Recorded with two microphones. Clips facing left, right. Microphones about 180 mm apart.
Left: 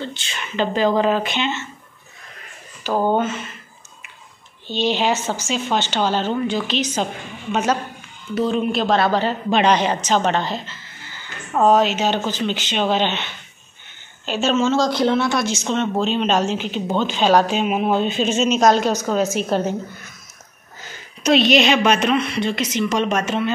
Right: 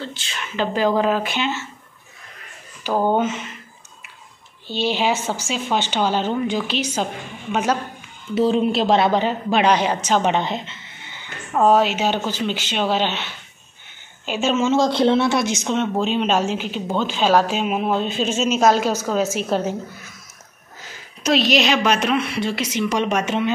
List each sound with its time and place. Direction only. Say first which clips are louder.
0.0 s speech: left 1 dB; centre (ahead or behind)
2.8 s speech: even; 10° right (ahead or behind)
4.6 s speech: left 1 dB; 10° right (ahead or behind)
8.4 s speech: right 2 dB; 25° right (ahead or behind)
11.6 s speech: left 1 dB; 10° right (ahead or behind); by 15.4 s 25° right (ahead or behind)
15.5 s speech: even; 10° right (ahead or behind)